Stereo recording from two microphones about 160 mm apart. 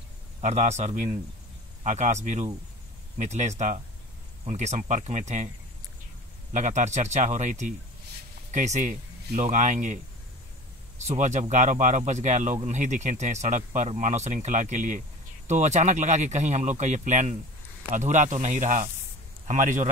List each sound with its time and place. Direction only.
0.4 s speech: 45° right (ahead or behind)
6.5 s speech: 45° right (ahead or behind)
11.1 s speech: 45° right (ahead or behind)